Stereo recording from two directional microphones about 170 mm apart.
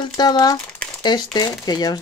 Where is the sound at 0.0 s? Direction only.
25° left (ahead or behind).